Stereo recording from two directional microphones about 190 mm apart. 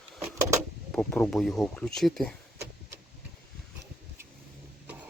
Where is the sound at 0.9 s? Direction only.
5° left (ahead or behind).